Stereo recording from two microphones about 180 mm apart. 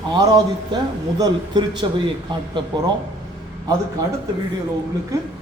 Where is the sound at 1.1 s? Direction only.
20° right (ahead or behind).